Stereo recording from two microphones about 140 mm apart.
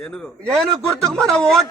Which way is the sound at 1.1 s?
5° left (ahead or behind).